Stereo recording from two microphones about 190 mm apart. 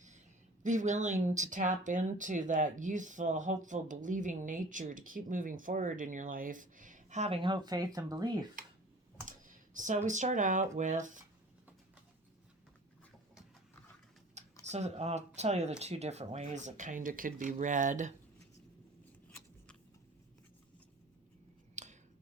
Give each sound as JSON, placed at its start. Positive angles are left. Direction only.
{"t": 0.6, "sound": "speech", "side_deg": -40}
{"t": 7.4, "sound": "speech", "side_deg": -20}
{"t": 9.2, "sound": "speech", "side_deg": -45}
{"t": 14.6, "sound": "speech", "side_deg": -35}
{"t": 21.8, "sound": "a sound", "side_deg": -40}